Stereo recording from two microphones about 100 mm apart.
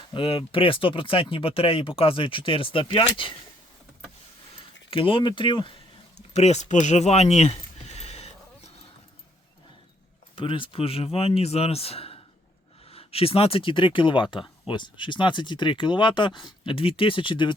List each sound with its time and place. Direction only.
0.1 s speech: 60° left (ahead or behind)
4.9 s speech: 60° left (ahead or behind)
6.3 s speech: 90° left
10.3 s speech: 60° left (ahead or behind)